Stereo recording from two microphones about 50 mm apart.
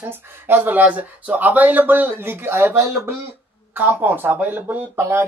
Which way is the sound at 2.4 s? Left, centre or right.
Right.